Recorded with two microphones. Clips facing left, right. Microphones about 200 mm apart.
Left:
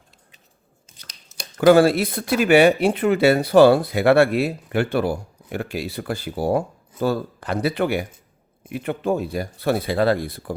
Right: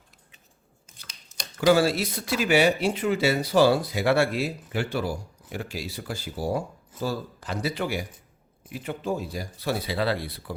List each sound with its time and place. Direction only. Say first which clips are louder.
1.5 s speech: left 7 dB; 55° left (ahead or behind)